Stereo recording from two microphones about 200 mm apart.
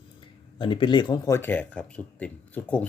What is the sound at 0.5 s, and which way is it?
Speech, 25° left (ahead or behind).